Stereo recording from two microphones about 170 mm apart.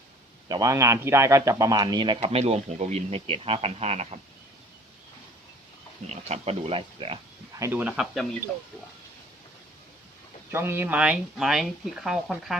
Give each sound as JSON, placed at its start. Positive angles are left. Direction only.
{"t": 0.4, "sound": "a man's voice", "side_deg": -20}
{"t": 6.1, "sound": "speech", "side_deg": -40}
{"t": 7.6, "sound": "speech", "side_deg": -10}
{"t": 10.5, "sound": "speech", "side_deg": -15}